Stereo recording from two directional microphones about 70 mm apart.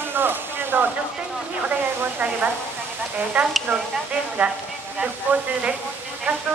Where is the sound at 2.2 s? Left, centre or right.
Right.